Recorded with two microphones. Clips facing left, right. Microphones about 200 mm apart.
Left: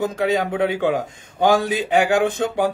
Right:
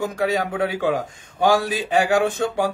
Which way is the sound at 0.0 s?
20° left (ahead or behind).